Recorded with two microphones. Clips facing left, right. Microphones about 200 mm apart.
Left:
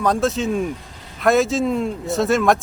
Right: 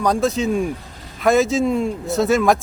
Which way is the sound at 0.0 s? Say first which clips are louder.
Right 1 dB; centre (ahead or behind).